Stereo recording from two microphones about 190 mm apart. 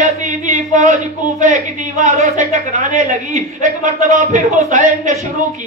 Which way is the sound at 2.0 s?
40° right (ahead or behind).